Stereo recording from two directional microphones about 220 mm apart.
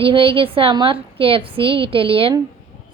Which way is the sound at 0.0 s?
25° right (ahead or behind).